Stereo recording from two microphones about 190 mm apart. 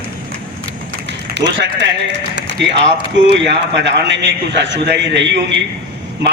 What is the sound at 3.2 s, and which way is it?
A man's voice, 65° right (ahead or behind).